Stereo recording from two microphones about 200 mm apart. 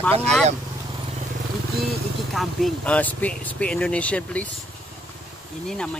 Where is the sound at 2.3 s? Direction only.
5° left (ahead or behind).